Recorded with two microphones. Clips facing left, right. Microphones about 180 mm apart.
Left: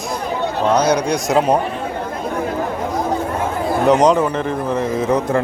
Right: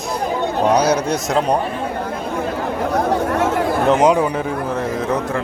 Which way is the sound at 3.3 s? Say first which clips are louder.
Right 4 dB; 80° right.